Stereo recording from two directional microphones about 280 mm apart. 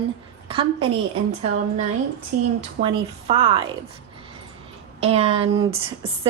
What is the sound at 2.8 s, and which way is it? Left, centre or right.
Speech, centre.